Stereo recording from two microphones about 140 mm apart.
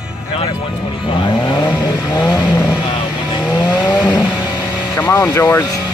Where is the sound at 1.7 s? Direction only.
5° right (ahead or behind).